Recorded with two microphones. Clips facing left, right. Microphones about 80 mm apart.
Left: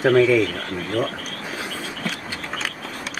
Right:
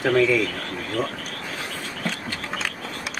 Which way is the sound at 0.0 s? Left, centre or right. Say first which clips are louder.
Left 4 dB; centre.